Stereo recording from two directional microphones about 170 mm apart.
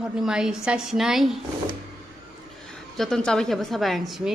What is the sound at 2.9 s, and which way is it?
A woman's voice, 5° left (ahead or behind).